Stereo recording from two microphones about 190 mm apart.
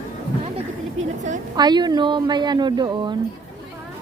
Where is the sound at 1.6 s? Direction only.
25° right (ahead or behind).